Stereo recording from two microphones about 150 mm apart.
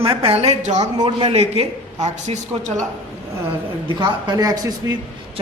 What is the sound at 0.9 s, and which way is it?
A woman's voice, 35° right (ahead or behind).